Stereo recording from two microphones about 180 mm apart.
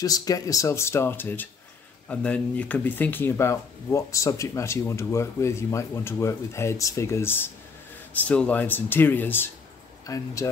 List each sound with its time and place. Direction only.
0.0 s speech: 20° left (ahead or behind)